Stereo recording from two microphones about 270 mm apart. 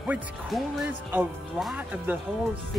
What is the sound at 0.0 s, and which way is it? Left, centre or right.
A man's voice, centre.